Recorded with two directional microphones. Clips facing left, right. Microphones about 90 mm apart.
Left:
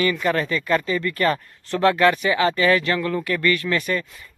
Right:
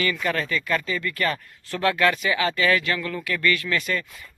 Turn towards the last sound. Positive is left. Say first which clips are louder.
# left 3 dB
turn(degrees=25)  # may be behind; listen again after turning